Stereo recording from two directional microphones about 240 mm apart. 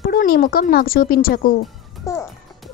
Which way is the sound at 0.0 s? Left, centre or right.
Left.